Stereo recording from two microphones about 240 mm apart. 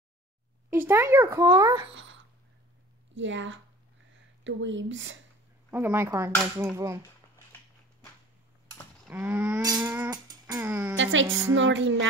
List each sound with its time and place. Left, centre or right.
0.7 s a child's voice: centre
1.9 s speech: right
3.2 s speech: right
5.7 s a child's voice: centre
9.1 s a child's voice: centre
11.0 s speech: right
11.2 s a child's voice: centre
11.5 s speech: right